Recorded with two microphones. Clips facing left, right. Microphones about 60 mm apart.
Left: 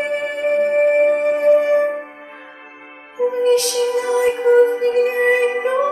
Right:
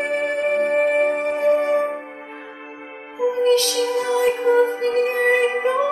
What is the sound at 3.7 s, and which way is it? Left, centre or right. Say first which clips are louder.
Music: left 2 dB; right.